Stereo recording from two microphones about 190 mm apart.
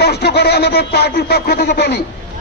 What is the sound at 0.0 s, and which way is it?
A man's voice, 60° left (ahead or behind).